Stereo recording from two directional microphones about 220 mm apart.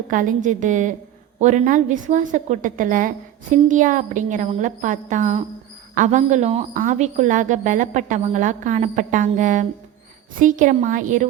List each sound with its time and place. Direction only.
0.1 s a woman's voice: 35° right (ahead or behind)